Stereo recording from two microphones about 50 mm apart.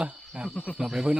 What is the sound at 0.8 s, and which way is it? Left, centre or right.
Speech, centre.